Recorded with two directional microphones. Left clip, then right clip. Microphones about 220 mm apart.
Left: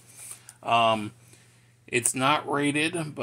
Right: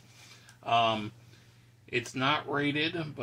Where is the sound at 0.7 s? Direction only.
50° left (ahead or behind).